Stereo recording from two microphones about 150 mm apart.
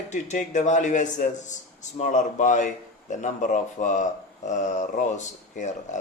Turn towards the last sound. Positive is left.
turn(degrees=55)  # may be behind; listen again after turning